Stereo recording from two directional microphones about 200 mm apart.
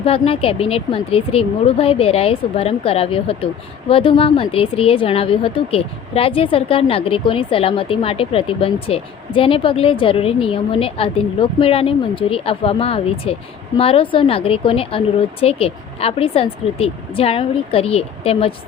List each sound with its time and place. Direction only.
0.0 s speech: 30° left (ahead or behind)